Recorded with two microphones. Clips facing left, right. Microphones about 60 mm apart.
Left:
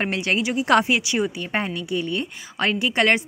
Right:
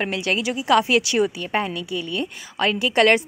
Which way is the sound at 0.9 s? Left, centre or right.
Centre.